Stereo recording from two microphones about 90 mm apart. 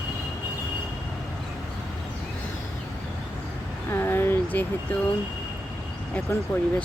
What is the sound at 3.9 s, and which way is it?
Vehicle, 25° left (ahead or behind).